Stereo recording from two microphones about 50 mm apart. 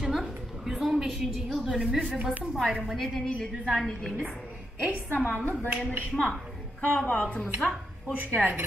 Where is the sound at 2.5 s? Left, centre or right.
Centre.